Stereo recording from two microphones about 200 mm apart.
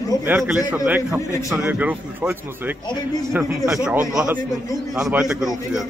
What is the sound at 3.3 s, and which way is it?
Speech, 10° right (ahead or behind).